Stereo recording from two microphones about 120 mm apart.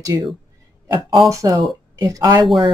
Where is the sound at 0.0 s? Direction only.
35° right (ahead or behind).